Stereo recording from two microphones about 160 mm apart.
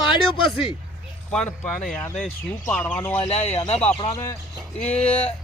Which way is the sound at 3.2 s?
40° left (ahead or behind).